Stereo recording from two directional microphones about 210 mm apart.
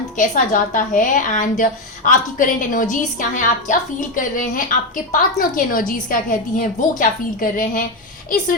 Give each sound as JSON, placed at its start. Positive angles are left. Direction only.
{"t": 0.2, "sound": "a woman's voice", "side_deg": 40}